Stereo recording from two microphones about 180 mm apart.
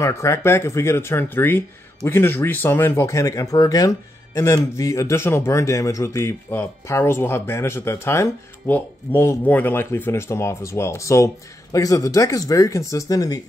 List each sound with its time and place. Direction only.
0.0 s speech: 15° left (ahead or behind)